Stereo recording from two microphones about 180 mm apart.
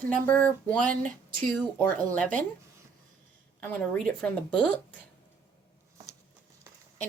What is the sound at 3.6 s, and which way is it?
Speech, 10° left (ahead or behind).